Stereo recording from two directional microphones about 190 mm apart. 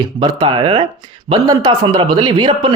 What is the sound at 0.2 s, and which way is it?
Speech, 25° right (ahead or behind).